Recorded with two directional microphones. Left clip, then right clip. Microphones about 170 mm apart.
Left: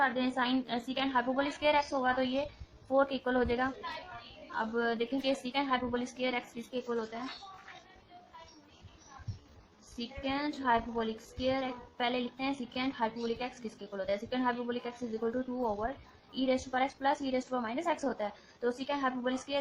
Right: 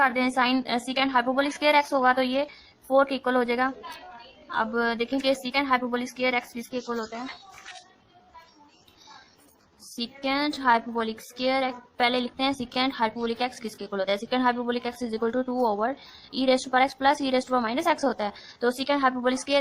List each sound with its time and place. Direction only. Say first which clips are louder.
0.0 s a woman's voice: right 8 dB; 35° right (ahead or behind)
10.0 s a woman's voice: right 8 dB; 35° right (ahead or behind)